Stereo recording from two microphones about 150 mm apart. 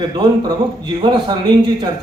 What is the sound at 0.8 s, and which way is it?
Speech, 30° right (ahead or behind).